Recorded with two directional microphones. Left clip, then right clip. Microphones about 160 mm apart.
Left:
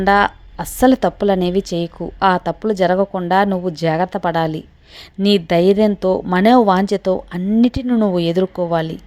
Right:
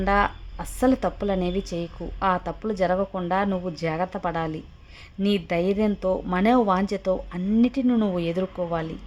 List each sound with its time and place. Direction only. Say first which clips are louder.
0.0 s a woman's voice: left 8 dB; 40° left (ahead or behind)